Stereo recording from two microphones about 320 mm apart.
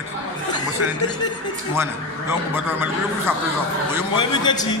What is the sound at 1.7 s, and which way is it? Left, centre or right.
A man's voice, centre.